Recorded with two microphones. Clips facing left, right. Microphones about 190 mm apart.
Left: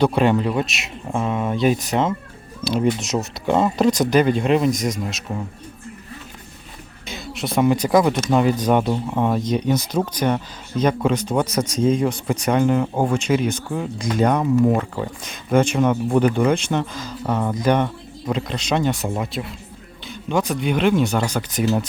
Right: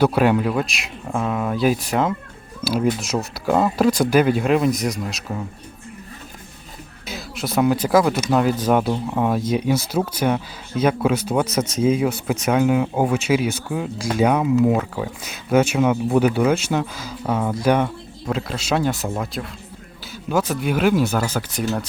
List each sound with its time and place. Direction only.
0.0 s speech: 5° right (ahead or behind)
7.1 s speech: centre (ahead or behind)
20.5 s speech: 5° right (ahead or behind)